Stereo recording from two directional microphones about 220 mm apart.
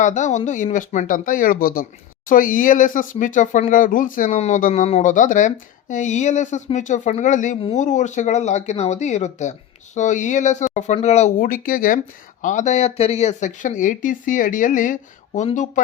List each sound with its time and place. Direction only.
0.0 s speech: 35° left (ahead or behind)